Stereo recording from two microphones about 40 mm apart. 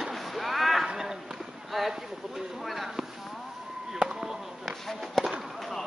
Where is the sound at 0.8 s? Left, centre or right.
Centre.